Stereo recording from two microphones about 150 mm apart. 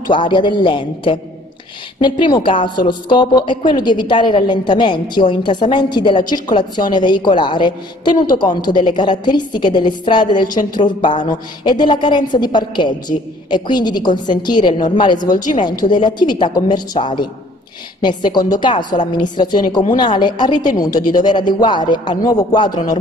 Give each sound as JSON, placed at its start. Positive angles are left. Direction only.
{"t": 0.1, "sound": "a woman's voice", "side_deg": 35}
{"t": 10.6, "sound": "speech", "side_deg": 65}
{"t": 11.0, "sound": "a woman's voice", "side_deg": 30}